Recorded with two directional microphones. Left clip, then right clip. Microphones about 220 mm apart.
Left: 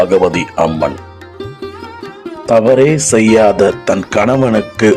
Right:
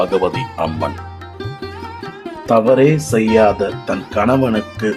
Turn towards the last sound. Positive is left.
turn(degrees=30)  # may be behind; listen again after turning